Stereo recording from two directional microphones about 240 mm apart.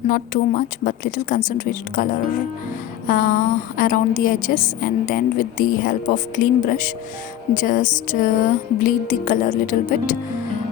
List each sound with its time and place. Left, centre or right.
0.1 s a woman's voice: left
3.1 s a woman's voice: left